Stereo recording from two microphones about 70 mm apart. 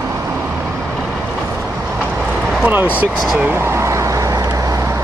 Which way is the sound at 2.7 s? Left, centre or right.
Right.